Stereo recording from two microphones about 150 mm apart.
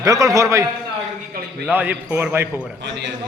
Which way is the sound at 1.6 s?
10° right (ahead or behind).